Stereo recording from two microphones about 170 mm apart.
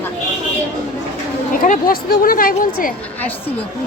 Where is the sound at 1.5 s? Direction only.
55° left (ahead or behind).